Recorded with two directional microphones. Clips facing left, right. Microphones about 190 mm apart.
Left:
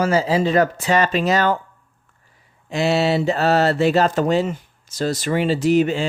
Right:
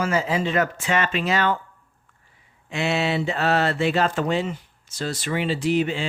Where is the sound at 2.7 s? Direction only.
40° left (ahead or behind).